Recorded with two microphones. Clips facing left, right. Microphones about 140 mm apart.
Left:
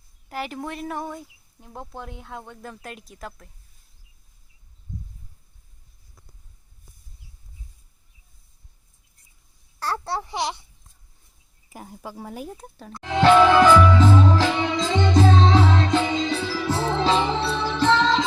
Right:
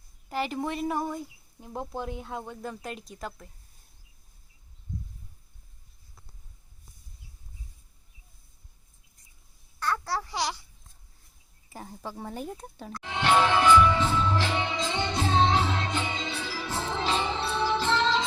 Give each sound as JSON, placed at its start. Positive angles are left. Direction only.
{"t": 0.3, "sound": "speech", "side_deg": 0}
{"t": 9.8, "sound": "a sound", "side_deg": 30}
{"t": 11.7, "sound": "speech", "side_deg": 10}
{"t": 13.1, "sound": "music", "side_deg": 90}